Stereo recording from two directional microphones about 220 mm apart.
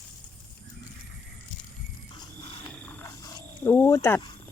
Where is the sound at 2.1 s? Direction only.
20° left (ahead or behind).